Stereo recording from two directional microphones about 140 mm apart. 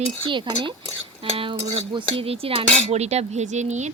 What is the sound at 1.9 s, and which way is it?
Cutlery, 40° right (ahead or behind).